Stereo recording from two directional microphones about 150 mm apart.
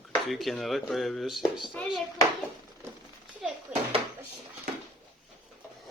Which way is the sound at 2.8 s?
15° right (ahead or behind).